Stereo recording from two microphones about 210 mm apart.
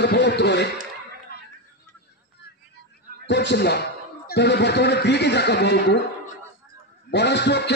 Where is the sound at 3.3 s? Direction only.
55° left (ahead or behind).